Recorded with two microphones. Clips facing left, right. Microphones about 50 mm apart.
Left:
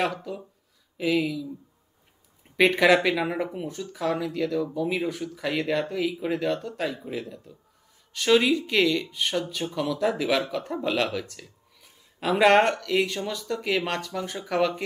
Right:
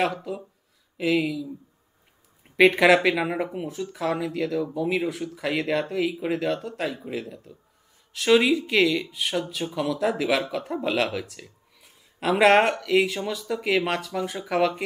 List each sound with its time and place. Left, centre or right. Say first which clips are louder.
0.0 s speech: right 2 dB; centre
2.5 s speech: right 2 dB; centre
9.7 s speech: right 1 dB; centre
9.9 s speech: even; centre